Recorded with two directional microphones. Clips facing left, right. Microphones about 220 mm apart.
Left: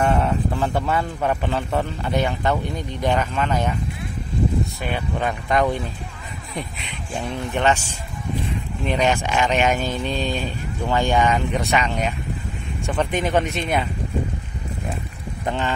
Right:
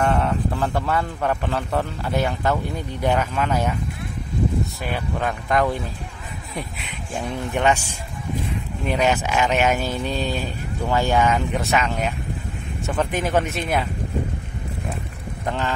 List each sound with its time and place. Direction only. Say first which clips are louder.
0.0 s a man's voice: left 1 dB; centre (ahead or behind)
4.9 s a man's voice: left 1 dB; centre (ahead or behind)
8.8 s a man's voice: even; 5° right (ahead or behind)
15.4 s speech: left 1 dB; centre (ahead or behind)